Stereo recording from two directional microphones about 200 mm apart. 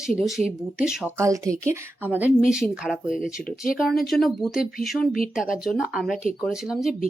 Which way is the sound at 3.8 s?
Centre (ahead or behind).